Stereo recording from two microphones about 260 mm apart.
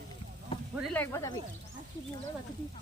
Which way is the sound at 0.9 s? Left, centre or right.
Centre.